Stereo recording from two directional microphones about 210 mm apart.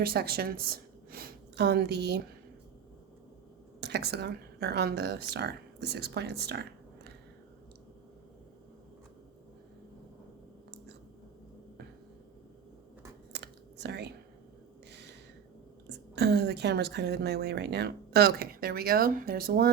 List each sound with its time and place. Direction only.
0.0 s a woman's voice: 45° right (ahead or behind)
3.8 s speech: 50° right (ahead or behind)
13.3 s computer keyboard: 50° right (ahead or behind)
14.8 s a sound: 55° right (ahead or behind)
15.9 s a woman's voice: 50° right (ahead or behind)